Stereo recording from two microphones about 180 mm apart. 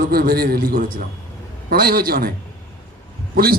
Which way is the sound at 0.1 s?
55° right (ahead or behind).